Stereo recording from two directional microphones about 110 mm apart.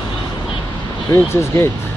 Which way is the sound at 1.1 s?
25° left (ahead or behind).